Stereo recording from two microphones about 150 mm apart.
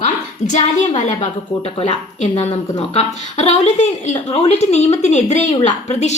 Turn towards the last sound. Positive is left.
turn(degrees=50)  # may be behind; listen again after turning